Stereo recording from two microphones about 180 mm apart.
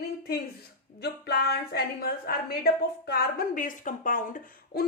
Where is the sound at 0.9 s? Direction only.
65° left (ahead or behind).